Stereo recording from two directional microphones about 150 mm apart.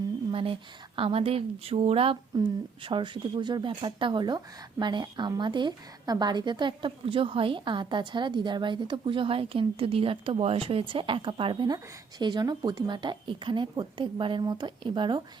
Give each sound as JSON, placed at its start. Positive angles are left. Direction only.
{"t": 0.3, "sound": "speech", "side_deg": -35}